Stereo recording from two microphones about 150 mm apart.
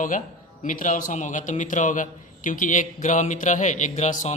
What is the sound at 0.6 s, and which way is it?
A man's voice, 60° left (ahead or behind).